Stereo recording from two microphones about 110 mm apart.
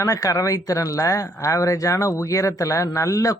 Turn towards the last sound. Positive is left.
turn(degrees=30)  # may be behind; listen again after turning